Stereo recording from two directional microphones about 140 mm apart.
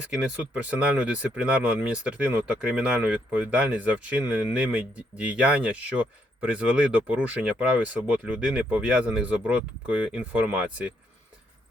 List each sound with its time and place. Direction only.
0.5 s speech: 10° right (ahead or behind)